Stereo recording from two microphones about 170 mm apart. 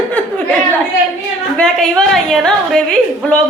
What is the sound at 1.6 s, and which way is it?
A woman's voice, 5° left (ahead or behind).